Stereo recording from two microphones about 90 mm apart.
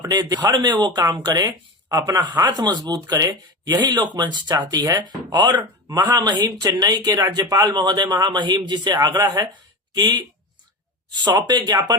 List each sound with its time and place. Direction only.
0.1 s speech: 45° right (ahead or behind)